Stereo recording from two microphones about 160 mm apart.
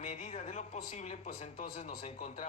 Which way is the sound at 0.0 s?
40° left (ahead or behind).